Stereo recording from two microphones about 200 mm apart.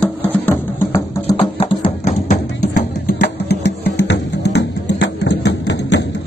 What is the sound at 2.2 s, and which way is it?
Music, 45° left (ahead or behind).